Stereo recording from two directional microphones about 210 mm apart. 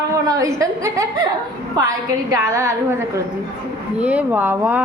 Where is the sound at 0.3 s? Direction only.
15° right (ahead or behind).